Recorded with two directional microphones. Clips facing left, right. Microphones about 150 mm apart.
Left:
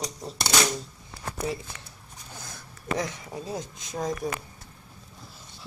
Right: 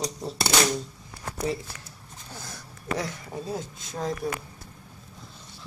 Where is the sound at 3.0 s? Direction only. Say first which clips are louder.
Even; centre (ahead or behind).